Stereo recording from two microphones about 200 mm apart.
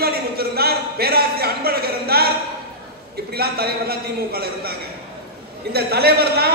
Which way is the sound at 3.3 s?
50° right (ahead or behind).